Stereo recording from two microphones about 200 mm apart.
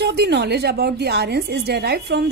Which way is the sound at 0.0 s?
55° right (ahead or behind).